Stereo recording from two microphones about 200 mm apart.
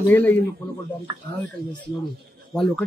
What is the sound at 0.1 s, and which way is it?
Speech, 10° left (ahead or behind).